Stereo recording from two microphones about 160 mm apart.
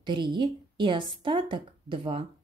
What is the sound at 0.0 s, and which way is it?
A woman's voice, 30° right (ahead or behind).